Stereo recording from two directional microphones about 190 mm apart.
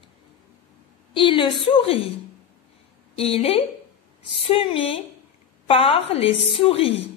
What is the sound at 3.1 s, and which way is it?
Speech, 30° left (ahead or behind).